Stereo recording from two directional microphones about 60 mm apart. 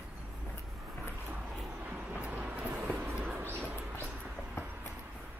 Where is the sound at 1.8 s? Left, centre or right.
Right.